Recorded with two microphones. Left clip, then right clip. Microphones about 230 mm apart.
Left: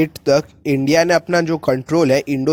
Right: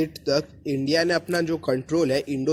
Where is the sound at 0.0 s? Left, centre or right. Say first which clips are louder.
Left 8 dB; left.